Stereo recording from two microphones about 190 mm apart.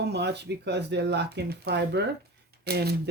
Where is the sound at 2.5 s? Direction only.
55° right (ahead or behind).